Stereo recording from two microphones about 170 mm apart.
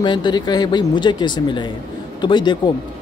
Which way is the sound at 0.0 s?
25° left (ahead or behind).